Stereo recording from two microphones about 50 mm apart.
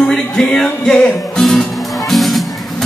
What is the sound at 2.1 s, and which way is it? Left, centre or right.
Music, centre.